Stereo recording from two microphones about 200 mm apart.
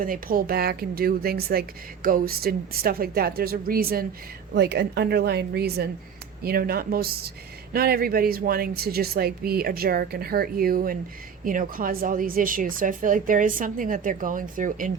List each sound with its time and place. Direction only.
0.0 s a woman's voice: 45° right (ahead or behind)